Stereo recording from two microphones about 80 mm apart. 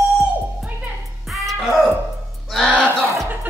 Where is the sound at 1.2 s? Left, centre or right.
Centre.